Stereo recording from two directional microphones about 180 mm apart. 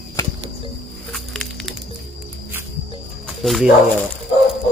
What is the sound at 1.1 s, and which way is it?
Music, centre (ahead or behind).